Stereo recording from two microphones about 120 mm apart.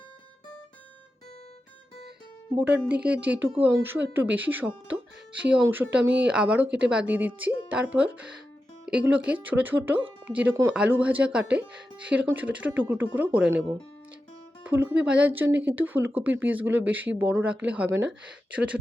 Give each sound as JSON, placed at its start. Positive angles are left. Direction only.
{"t": 2.6, "sound": "speech", "side_deg": -10}